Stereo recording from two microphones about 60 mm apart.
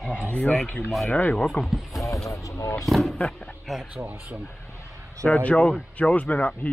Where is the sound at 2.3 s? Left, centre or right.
Left.